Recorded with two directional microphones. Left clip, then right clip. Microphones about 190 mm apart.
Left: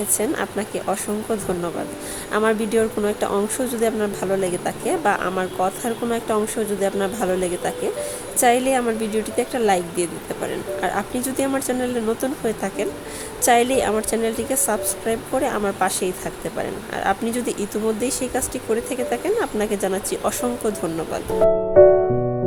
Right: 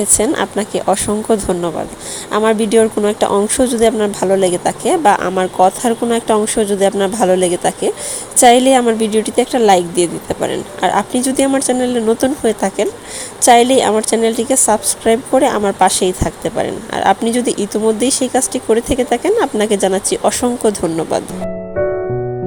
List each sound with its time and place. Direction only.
0.2 s a woman's voice: 25° right (ahead or behind)